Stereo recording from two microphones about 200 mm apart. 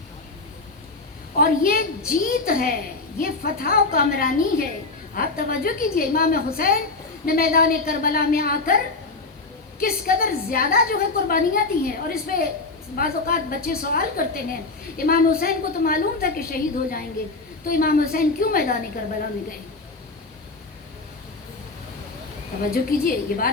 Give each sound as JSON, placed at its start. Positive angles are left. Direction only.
{"t": 1.4, "sound": "a woman's voice", "side_deg": 45}
{"t": 9.8, "sound": "a woman's voice", "side_deg": 45}
{"t": 22.7, "sound": "a woman's voice", "side_deg": 45}